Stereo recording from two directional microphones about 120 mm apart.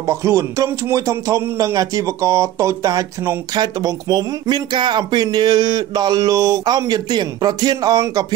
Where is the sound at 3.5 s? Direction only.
35° right (ahead or behind).